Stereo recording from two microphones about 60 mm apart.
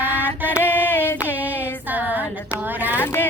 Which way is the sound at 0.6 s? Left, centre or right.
Left.